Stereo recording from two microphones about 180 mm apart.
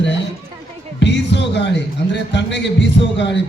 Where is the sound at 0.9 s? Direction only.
80° left.